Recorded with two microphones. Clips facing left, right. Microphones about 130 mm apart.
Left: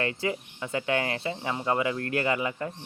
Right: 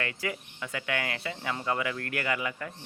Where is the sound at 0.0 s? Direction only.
25° left (ahead or behind).